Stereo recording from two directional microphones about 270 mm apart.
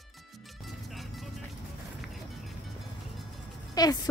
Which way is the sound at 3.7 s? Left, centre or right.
Centre.